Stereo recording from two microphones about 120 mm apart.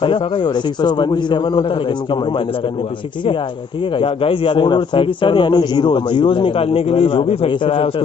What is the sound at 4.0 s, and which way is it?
A man's voice, 45° left (ahead or behind).